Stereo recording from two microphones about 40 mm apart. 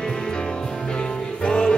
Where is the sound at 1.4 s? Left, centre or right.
Left.